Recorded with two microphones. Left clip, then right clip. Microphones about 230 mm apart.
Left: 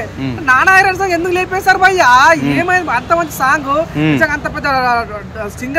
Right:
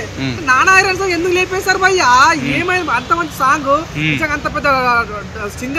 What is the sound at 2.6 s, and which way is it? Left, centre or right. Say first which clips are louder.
Speech: left 2 dB; centre.